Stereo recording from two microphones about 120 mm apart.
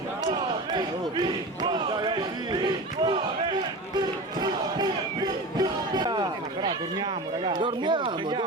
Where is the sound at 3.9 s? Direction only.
35° right (ahead or behind).